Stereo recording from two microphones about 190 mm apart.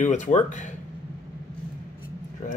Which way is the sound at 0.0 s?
40° left (ahead or behind).